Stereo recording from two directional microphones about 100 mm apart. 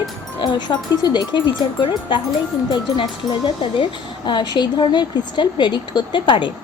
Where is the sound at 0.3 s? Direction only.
45° left (ahead or behind).